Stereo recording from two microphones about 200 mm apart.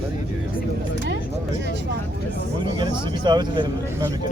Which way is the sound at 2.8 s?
20° right (ahead or behind).